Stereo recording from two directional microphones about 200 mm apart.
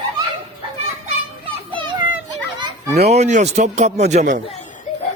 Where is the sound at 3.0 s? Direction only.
35° right (ahead or behind).